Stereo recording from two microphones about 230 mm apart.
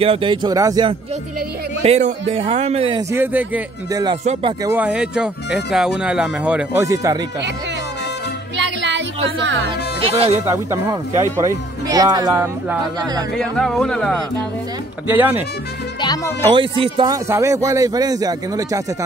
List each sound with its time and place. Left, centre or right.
0.0 s a man's voice: right
1.8 s a man's voice: right; by 4.0 s centre
4.0 s a man's voice: right
4.7 s speech: centre
8.5 s music: right
9.7 s music: right
10.4 s speech: centre
13.4 s speech: centre
15.0 s speech: centre
16.0 s speech: centre
16.4 s speech: right